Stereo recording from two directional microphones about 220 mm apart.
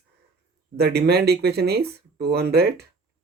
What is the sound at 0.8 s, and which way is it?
Speech, 45° right (ahead or behind).